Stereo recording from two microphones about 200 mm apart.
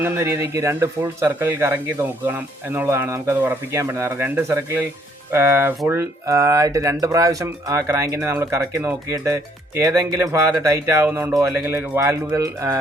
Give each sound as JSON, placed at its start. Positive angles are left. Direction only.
{"t": 0.0, "sound": "speech", "side_deg": -10}